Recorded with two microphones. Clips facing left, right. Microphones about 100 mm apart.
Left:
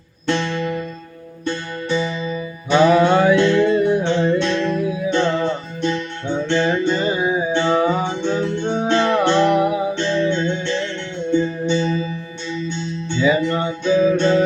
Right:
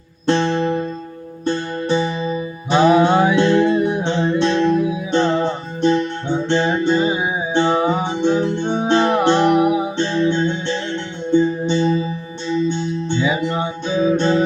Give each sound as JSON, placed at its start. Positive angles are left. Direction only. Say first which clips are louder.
{"t": 0.3, "sound": "music", "louder": "right 4 dB", "side_deg": -45}
{"t": 2.9, "sound": "music", "louder": "even", "side_deg": -20}
{"t": 5.8, "sound": "music", "louder": "right 7 dB", "side_deg": -45}
{"t": 6.2, "sound": "music", "louder": "left 3 dB", "side_deg": -15}
{"t": 11.6, "sound": "music", "louder": "right 2 dB", "side_deg": -45}
{"t": 13.2, "sound": "music", "louder": "left 6 dB", "side_deg": -15}